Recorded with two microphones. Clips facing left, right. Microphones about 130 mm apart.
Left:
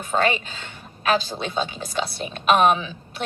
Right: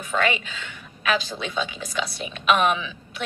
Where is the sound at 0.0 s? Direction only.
35° left (ahead or behind).